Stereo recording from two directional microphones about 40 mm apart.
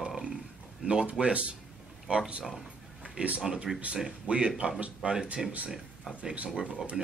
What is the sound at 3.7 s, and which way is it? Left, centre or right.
Speech, centre.